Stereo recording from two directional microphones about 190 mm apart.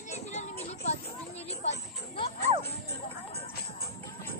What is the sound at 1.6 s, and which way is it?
Music, 35° left (ahead or behind).